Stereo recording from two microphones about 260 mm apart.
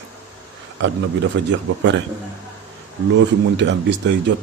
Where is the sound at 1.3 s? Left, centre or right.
Right.